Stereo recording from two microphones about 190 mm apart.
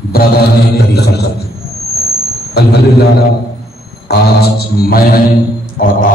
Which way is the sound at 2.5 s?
60° left (ahead or behind).